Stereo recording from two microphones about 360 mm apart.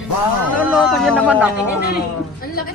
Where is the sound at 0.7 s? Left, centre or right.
Centre.